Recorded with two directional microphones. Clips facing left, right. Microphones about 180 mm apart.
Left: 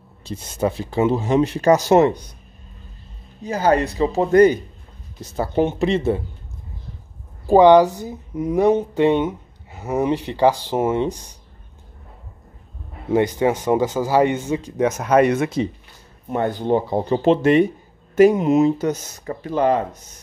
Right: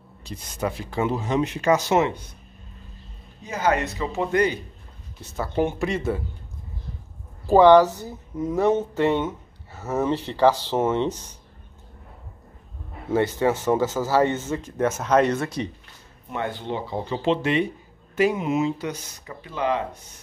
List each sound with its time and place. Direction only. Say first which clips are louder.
0.3 s speech: left 6 dB; 25° left (ahead or behind)
3.4 s speech: left 5 dB; 35° left (ahead or behind)
5.3 s speech: left 4 dB; 25° left (ahead or behind)
7.4 s a woman's voice: left 2 dB; 15° left (ahead or behind)
13.1 s a woman's voice: left 3 dB; 15° left (ahead or behind)
16.3 s speech: left 9 dB; 40° left (ahead or behind)